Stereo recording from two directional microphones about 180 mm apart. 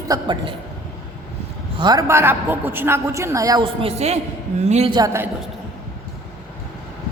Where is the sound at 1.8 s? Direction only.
20° right (ahead or behind).